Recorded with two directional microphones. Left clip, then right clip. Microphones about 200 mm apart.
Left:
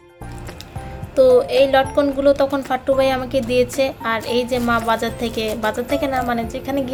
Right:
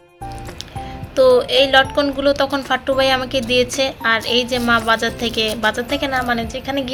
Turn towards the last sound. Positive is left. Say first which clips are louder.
# even
turn(degrees=10)  # may be behind; listen again after turning